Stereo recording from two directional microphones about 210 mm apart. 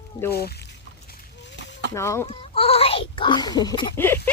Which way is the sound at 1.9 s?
15° left (ahead or behind).